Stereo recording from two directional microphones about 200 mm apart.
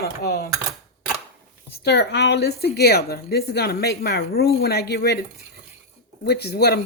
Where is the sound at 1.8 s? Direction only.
60° left (ahead or behind).